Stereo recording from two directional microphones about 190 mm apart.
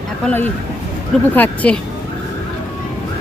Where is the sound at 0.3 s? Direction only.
10° left (ahead or behind).